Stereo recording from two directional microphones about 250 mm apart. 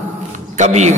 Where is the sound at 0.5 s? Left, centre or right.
Right.